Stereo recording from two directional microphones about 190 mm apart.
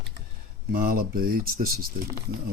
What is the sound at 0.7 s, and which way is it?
Speech, 50° right (ahead or behind).